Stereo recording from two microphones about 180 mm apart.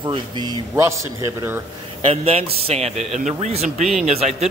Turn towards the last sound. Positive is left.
turn(degrees=-35)  # may be behind; listen again after turning